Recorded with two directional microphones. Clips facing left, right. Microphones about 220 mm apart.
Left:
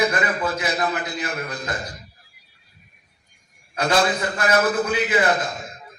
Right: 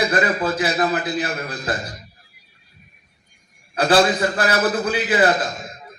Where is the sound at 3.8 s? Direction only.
35° right (ahead or behind).